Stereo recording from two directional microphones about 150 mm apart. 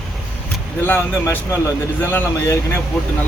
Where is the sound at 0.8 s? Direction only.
15° left (ahead or behind).